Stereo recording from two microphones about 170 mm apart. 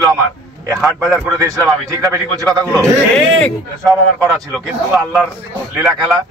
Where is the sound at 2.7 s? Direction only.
5° left (ahead or behind).